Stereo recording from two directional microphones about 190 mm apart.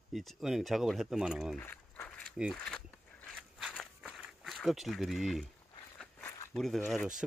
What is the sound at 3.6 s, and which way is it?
Walk, 5° left (ahead or behind).